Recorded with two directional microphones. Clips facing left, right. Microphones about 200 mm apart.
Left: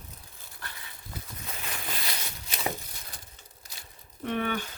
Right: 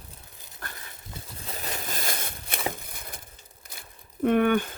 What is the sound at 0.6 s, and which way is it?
Dog, 45° right (ahead or behind).